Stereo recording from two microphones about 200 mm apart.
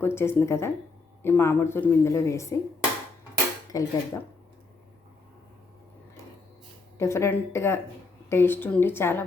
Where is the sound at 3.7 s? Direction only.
15° left (ahead or behind).